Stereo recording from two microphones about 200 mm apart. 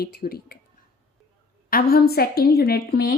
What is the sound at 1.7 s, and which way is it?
A woman's voice, 50° left (ahead or behind).